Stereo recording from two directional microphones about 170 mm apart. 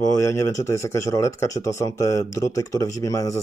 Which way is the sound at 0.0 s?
15° left (ahead or behind).